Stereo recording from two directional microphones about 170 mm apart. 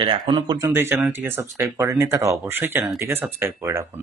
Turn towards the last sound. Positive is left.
turn(degrees=-15)  # may be behind; listen again after turning